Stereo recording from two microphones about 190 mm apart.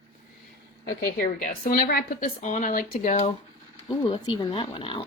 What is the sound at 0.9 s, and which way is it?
A woman's voice, 55° left (ahead or behind).